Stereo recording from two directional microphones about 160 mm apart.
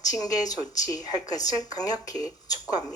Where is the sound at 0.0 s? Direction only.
25° left (ahead or behind).